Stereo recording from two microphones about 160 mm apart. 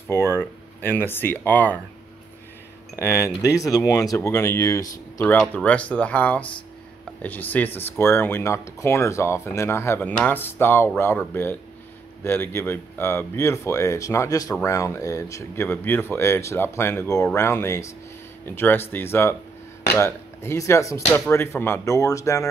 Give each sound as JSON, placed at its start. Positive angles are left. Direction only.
{"t": 0.1, "sound": "speech", "side_deg": 15}
{"t": 3.0, "sound": "speech", "side_deg": 15}